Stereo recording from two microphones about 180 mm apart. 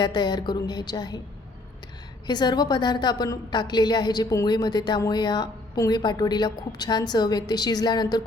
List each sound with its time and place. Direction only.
0.0 s a woman's voice: 25° left (ahead or behind)
2.2 s a woman's voice: 25° left (ahead or behind)